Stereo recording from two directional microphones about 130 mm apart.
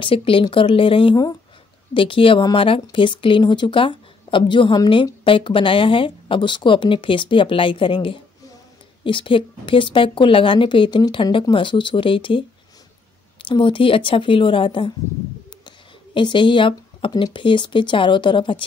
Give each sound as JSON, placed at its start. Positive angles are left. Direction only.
{"t": 0.0, "sound": "a woman's voice", "side_deg": 45}
{"t": 16.2, "sound": "speech", "side_deg": 40}